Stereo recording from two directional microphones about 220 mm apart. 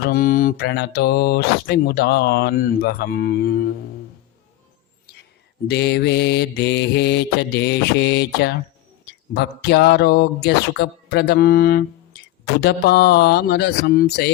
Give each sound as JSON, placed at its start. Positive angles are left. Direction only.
{"t": 0.0, "sound": "speech", "side_deg": 40}
{"t": 5.6, "sound": "speech", "side_deg": 50}